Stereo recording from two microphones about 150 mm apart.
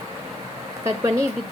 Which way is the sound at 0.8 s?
20° right (ahead or behind).